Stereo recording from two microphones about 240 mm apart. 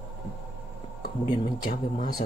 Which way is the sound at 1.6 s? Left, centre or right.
Left.